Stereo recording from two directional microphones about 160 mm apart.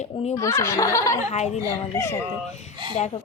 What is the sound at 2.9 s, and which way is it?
Speech, 40° left (ahead or behind).